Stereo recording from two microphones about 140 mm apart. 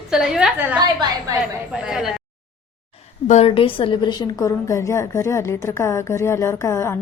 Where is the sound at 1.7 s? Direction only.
5° right (ahead or behind).